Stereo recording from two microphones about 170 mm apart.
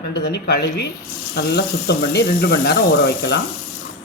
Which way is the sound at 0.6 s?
85° left.